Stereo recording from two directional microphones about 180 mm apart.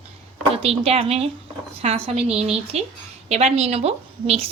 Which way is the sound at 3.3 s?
35° right (ahead or behind).